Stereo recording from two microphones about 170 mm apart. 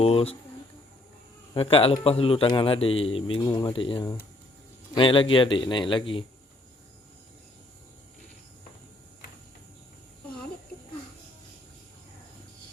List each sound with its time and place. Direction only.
0.0 s a man's voice: 35° left (ahead or behind)
1.5 s a man's voice: 35° left (ahead or behind)
3.4 s a man's voice: 20° left (ahead or behind)